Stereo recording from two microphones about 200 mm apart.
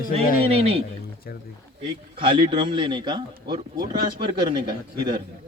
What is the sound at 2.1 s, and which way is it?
A man's voice, 25° right (ahead or behind).